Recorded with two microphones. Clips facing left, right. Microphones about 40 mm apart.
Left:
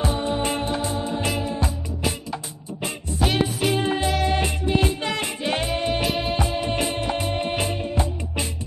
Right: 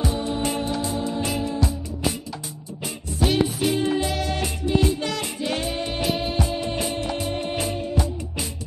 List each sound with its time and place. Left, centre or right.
0.0 s music: left
3.2 s music: centre
3.7 s music: left
6.0 s music: centre
6.5 s music: left
6.8 s music: left